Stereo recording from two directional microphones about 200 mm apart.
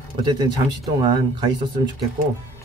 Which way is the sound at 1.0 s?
20° right (ahead or behind).